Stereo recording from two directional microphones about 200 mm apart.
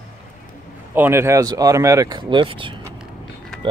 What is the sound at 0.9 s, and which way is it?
Speech, 10° right (ahead or behind).